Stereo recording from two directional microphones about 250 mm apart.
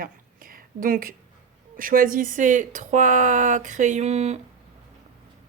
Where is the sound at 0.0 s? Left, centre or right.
Right.